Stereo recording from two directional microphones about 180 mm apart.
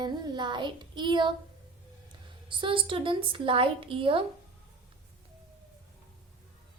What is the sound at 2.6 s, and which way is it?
A woman's voice, 30° right (ahead or behind).